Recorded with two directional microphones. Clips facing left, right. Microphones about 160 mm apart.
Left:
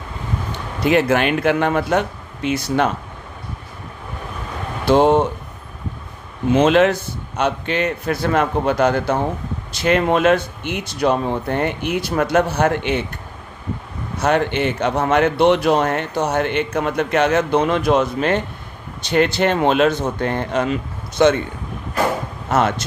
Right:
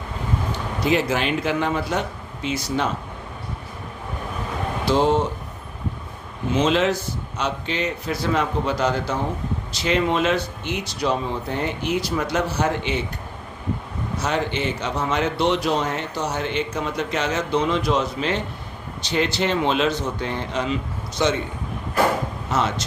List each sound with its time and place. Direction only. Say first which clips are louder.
0.9 s speech: left 5 dB; 60° left (ahead or behind)
4.9 s speech: left 6 dB; 60° left (ahead or behind)
6.5 s speech: left 6 dB; 55° left (ahead or behind)
14.2 s speech: left 7 dB; 60° left (ahead or behind)
22.4 s speech: left 6 dB; 55° left (ahead or behind)